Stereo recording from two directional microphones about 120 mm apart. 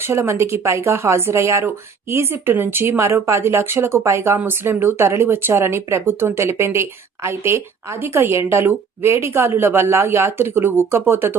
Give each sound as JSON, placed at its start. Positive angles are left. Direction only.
{"t": 0.1, "sound": "speech", "side_deg": -20}